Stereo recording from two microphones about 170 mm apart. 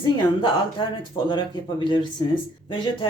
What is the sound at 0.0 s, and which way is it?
Speech, 30° left (ahead or behind).